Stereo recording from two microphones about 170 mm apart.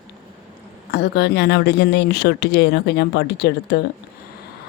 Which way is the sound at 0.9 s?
75° left (ahead or behind).